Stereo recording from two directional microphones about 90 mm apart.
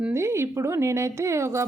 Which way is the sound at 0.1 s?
30° right (ahead or behind).